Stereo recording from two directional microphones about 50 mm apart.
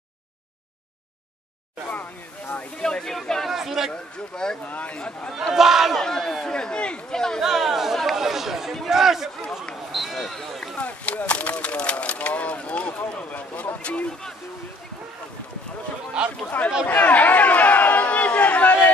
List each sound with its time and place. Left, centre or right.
1.9 s a sound: left
2.8 s speech: centre
3.4 s a sound: centre
3.9 s speech: centre
4.6 s speech: left
4.9 s speech: centre
5.3 s speech: centre
5.9 s speech: centre
7.4 s chatter: centre
8.8 s speech: centre
9.9 s basketball bounce: centre
10.8 s speech: left
16.2 s speech: centre
16.8 s chatter: left